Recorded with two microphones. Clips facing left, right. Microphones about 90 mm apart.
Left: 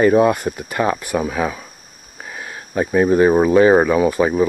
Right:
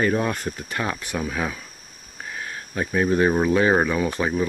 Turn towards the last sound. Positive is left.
turn(degrees=10)  # may be behind; listen again after turning